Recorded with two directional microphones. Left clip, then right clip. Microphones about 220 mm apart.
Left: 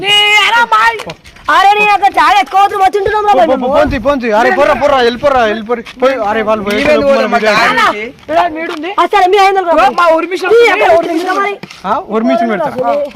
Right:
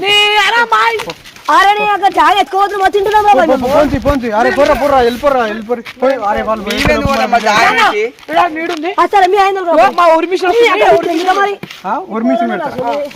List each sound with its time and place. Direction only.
0.0 s a sound: 15° left (ahead or behind)
1.5 s speech: 30° left (ahead or behind)
3.9 s speech: 55° left (ahead or behind)
6.9 s speech: 20° left (ahead or behind)
9.0 s speech: 35° left (ahead or behind); by 11.5 s 20° left (ahead or behind)
11.9 s speech: 50° left (ahead or behind)